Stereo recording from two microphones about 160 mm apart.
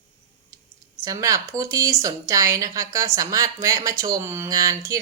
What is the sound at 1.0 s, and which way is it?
Speech, 20° right (ahead or behind).